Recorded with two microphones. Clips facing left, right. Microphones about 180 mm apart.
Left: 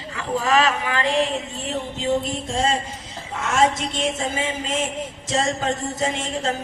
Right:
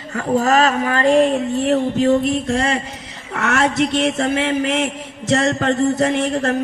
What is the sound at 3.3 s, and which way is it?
A man's voice, 70° right (ahead or behind).